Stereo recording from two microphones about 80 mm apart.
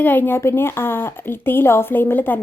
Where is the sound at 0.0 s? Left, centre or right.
Left.